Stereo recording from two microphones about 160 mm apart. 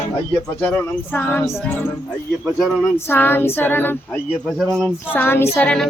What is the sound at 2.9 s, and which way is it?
Speech, 15° left (ahead or behind).